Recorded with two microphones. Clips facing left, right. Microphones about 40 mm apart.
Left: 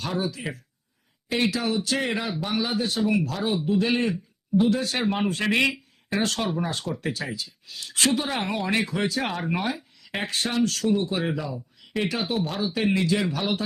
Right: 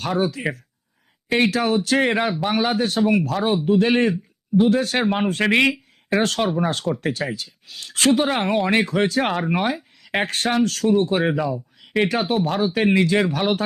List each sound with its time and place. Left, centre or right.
0.2 s speech: right
6.1 s speech: right